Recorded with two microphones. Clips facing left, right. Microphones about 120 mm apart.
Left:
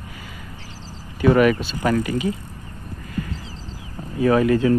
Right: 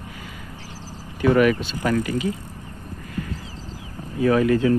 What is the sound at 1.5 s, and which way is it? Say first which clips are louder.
Speech: left 1 dB; 5° left (ahead or behind).